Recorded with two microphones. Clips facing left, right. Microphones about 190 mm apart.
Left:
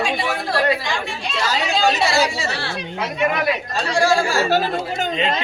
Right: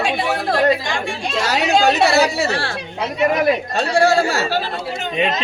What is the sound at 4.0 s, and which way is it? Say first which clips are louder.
Speech: right 2 dB; 65° right (ahead or behind).